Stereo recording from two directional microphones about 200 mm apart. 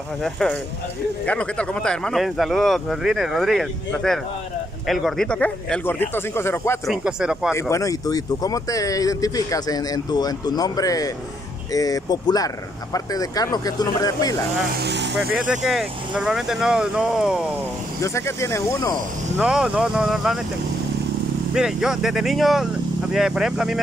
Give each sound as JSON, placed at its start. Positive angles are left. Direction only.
{"t": 0.2, "sound": "speech", "side_deg": 5}
{"t": 6.9, "sound": "speech", "side_deg": -5}
{"t": 7.5, "sound": "speech", "side_deg": 15}
{"t": 14.8, "sound": "speech", "side_deg": -55}
{"t": 15.1, "sound": "speech", "side_deg": -5}
{"t": 18.0, "sound": "speech", "side_deg": 15}
{"t": 19.3, "sound": "speech", "side_deg": -5}
{"t": 21.5, "sound": "speech", "side_deg": -5}